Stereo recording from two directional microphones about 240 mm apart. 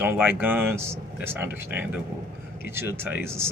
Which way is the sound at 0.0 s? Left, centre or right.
Centre.